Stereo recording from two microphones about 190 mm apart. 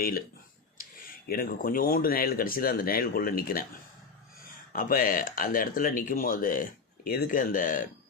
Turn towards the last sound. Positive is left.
turn(degrees=45)  # may be behind; listen again after turning